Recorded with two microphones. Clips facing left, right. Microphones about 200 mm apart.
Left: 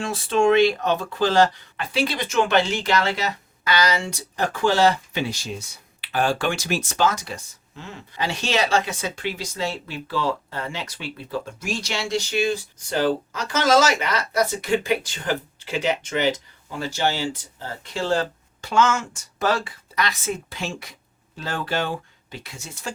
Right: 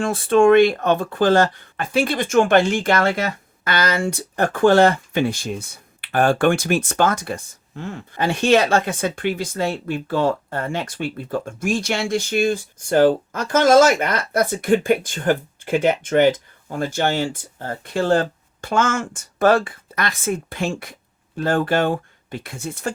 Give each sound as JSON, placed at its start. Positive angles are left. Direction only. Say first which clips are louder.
{"t": 0.0, "sound": "speech", "louder": "right 5 dB", "side_deg": -55}